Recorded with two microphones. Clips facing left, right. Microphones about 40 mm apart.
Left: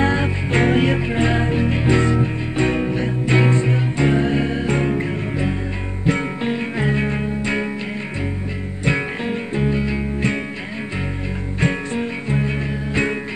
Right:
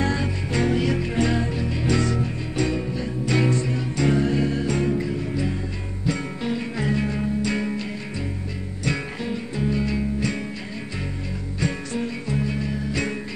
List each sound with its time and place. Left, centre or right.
0.0 s music: left
3.3 s music: left
8.8 s music: left
11.6 s music: left